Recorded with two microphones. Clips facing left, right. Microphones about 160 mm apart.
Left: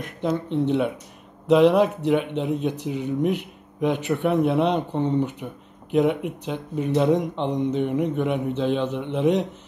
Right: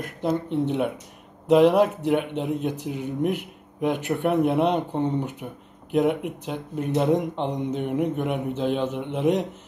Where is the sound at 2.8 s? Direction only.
55° right (ahead or behind).